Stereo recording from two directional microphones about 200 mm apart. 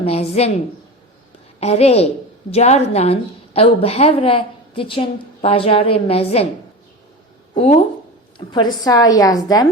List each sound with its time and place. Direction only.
0.0 s a woman's voice: 30° left (ahead or behind)
1.5 s a woman's voice: 30° left (ahead or behind)
7.5 s speech: 30° left (ahead or behind)
8.5 s a woman's voice: 20° left (ahead or behind)